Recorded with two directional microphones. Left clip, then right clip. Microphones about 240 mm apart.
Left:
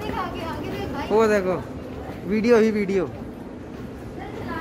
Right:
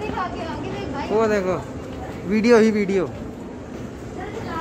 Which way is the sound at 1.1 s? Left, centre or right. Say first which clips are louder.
Left 1 dB; left.